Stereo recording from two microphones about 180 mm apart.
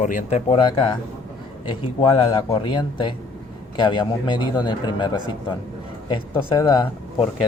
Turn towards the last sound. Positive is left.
turn(degrees=30)  # may be behind; listen again after turning